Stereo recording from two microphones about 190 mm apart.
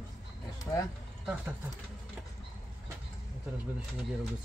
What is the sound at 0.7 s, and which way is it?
Speech, 20° left (ahead or behind).